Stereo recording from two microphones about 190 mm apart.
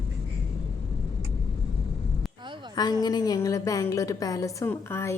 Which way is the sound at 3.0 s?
20° left (ahead or behind).